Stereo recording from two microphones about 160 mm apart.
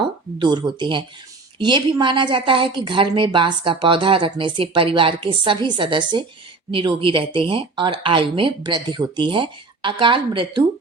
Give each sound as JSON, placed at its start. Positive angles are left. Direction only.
{"t": 0.3, "sound": "a woman's voice", "side_deg": -25}